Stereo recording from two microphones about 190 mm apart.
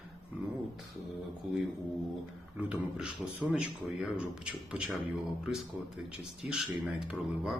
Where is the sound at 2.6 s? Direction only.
5° right (ahead or behind).